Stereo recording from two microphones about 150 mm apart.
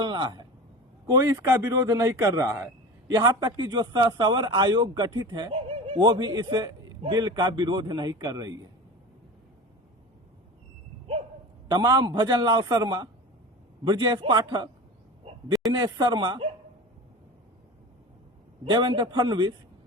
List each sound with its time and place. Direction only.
0.0 s speech: 30° right (ahead or behind)
11.7 s a man's voice: 25° right (ahead or behind)
15.7 s a man's voice: 30° right (ahead or behind)
18.6 s a man's voice: 35° right (ahead or behind)